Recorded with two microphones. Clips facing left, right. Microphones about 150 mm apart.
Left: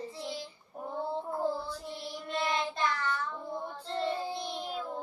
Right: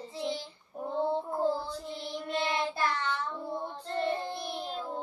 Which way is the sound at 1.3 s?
25° right (ahead or behind).